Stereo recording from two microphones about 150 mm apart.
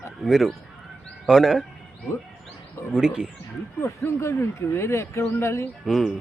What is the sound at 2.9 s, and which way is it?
Speech, 5° right (ahead or behind).